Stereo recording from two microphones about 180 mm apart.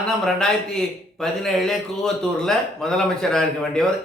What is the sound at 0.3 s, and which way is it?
Speech, 5° left (ahead or behind).